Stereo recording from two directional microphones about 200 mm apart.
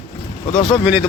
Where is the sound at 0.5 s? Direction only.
30° left (ahead or behind).